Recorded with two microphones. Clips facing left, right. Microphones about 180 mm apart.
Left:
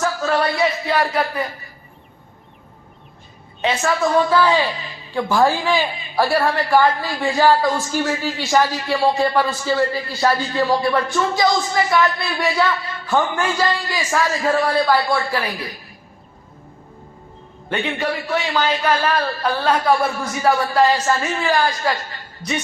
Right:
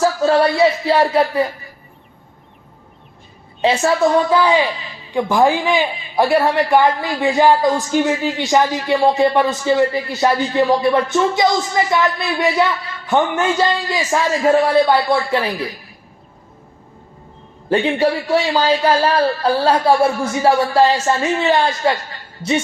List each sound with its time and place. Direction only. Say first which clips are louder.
0.0 s speech: right 6 dB; 30° right (ahead or behind)
3.6 s a woman's voice: right 5 dB; 30° right (ahead or behind)
4.4 s a man's voice: right 2 dB; 15° right (ahead or behind)
17.7 s a man's voice: right 7 dB; 30° right (ahead or behind)